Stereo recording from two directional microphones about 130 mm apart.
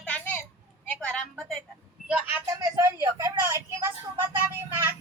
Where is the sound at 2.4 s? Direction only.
25° right (ahead or behind).